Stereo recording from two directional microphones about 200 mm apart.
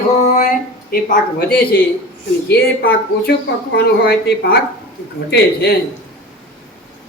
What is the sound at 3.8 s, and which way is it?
Speech, 50° left (ahead or behind).